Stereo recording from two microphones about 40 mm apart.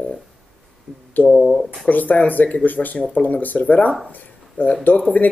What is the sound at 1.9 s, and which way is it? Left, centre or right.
Speech, left.